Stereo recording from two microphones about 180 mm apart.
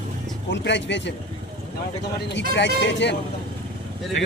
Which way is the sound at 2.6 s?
75° left (ahead or behind).